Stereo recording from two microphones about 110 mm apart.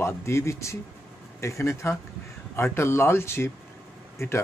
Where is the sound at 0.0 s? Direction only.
25° left (ahead or behind).